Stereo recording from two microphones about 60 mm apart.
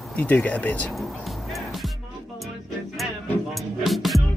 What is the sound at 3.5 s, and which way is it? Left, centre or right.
Music, centre.